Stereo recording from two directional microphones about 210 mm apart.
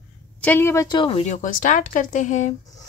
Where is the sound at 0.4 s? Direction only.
10° left (ahead or behind).